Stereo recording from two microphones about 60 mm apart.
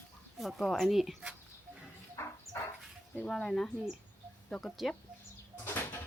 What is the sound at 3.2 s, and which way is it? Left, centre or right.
Speech, centre.